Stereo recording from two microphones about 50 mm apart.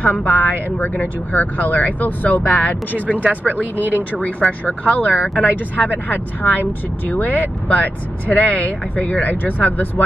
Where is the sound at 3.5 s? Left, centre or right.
Right.